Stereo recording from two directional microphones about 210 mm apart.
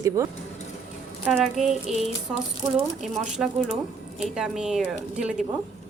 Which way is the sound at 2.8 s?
Centre (ahead or behind).